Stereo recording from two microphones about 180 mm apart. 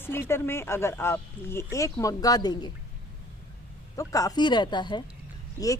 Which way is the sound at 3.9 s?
20° left (ahead or behind).